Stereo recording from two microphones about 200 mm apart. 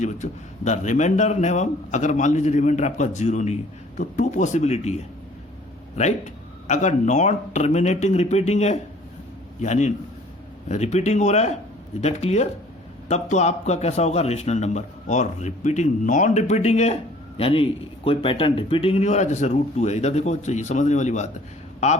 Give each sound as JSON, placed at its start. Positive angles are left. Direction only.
{"t": 0.0, "sound": "a man's voice", "side_deg": 35}
{"t": 6.7, "sound": "a man's voice", "side_deg": 35}